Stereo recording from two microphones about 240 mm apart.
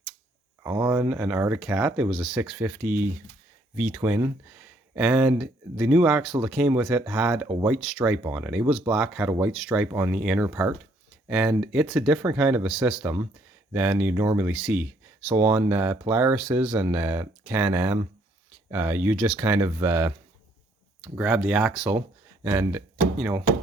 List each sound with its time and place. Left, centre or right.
0.6 s speech: centre
7.4 s speech: centre
7.7 s speech: centre